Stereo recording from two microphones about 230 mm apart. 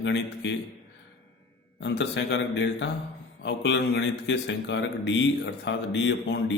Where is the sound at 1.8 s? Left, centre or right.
Left.